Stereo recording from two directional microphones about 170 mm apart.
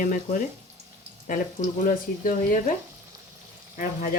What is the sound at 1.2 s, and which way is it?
Speech, 50° left (ahead or behind).